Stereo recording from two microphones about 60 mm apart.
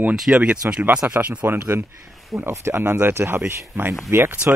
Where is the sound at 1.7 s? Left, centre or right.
Right.